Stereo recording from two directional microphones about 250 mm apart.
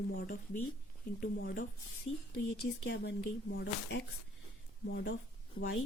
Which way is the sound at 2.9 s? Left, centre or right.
Left.